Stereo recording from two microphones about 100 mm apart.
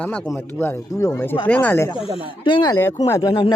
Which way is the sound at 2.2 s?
50° left (ahead or behind).